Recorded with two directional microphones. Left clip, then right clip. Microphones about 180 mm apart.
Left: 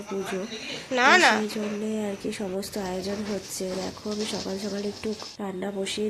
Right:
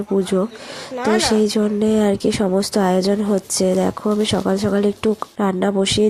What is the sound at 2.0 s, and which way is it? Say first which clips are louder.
Speech: right 13 dB; 50° right (ahead or behind).